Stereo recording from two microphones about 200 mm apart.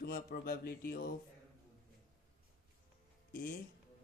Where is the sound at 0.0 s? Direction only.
50° left (ahead or behind).